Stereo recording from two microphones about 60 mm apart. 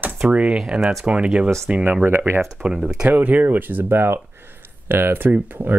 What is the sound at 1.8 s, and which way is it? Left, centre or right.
Speech, right.